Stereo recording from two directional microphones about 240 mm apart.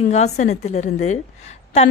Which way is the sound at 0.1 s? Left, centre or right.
Left.